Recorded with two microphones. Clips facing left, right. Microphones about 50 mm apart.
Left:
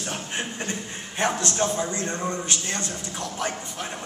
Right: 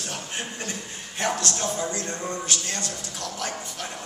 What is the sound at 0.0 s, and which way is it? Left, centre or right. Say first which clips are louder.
A man's voice: left 3 dB; left.